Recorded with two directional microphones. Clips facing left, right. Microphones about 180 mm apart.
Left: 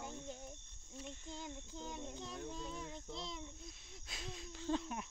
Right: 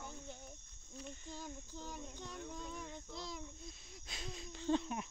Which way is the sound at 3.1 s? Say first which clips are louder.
Even; 25° left (ahead or behind).